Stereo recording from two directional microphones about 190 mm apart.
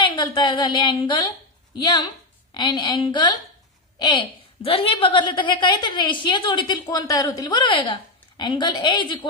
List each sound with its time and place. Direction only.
0.0 s a woman's voice: 25° left (ahead or behind)
2.5 s a woman's voice: 25° left (ahead or behind)
4.6 s a woman's voice: 30° left (ahead or behind)